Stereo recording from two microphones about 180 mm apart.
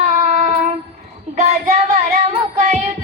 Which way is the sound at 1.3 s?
40° right (ahead or behind).